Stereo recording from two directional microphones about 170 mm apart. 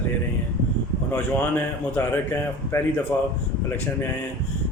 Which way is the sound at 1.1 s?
10° left (ahead or behind).